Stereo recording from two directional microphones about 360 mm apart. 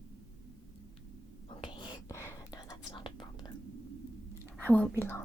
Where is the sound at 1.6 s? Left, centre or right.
Centre.